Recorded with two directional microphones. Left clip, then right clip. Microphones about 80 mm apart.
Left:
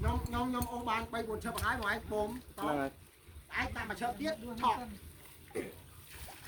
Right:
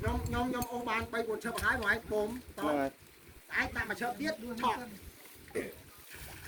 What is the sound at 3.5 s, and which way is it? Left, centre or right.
Speech, centre.